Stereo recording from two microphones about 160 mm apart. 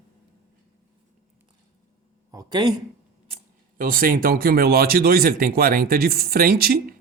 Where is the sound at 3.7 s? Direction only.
65° right (ahead or behind).